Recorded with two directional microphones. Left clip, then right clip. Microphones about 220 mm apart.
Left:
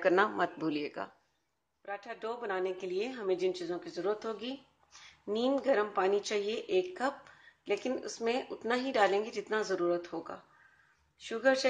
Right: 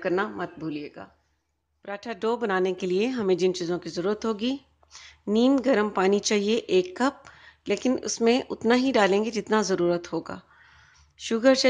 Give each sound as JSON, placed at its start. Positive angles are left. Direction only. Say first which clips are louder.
{"t": 0.0, "sound": "speech", "louder": "even", "side_deg": 0}
{"t": 1.9, "sound": "speech", "louder": "right 11 dB", "side_deg": -45}